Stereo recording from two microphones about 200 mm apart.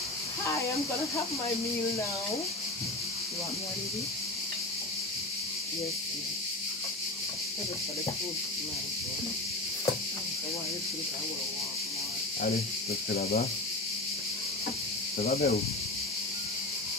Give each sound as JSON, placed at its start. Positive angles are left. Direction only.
{"t": 13.1, "sound": "speech", "side_deg": 45}
{"t": 15.1, "sound": "speech", "side_deg": 50}